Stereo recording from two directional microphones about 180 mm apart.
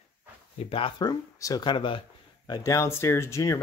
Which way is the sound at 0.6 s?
30° left (ahead or behind).